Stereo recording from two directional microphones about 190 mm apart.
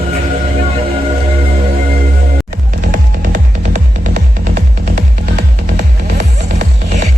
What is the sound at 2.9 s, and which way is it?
Music, 45° right (ahead or behind).